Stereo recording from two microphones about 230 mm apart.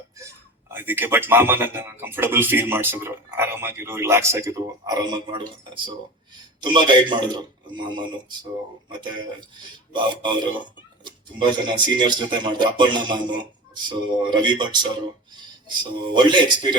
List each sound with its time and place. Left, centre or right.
0.7 s speech: centre
6.6 s speech: centre